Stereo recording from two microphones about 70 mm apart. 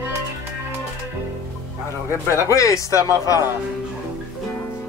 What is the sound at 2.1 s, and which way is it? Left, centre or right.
Speech, left.